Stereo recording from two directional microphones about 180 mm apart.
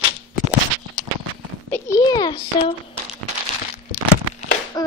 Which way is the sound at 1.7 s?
20° left (ahead or behind).